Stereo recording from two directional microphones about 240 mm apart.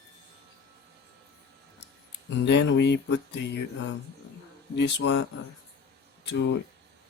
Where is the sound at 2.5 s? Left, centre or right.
Left.